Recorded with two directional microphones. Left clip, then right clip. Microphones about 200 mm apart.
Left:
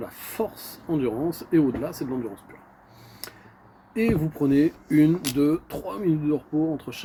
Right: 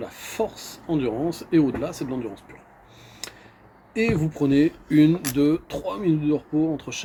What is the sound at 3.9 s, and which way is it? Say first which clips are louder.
Speech: right 1 dB; 10° right (ahead or behind).